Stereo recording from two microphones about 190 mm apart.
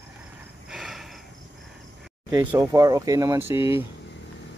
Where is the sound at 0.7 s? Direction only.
Centre (ahead or behind).